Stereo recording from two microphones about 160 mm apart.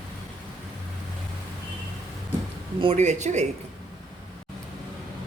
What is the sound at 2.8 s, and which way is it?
Speech, 40° right (ahead or behind).